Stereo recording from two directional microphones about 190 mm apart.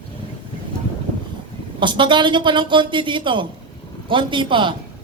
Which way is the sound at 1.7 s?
25° right (ahead or behind).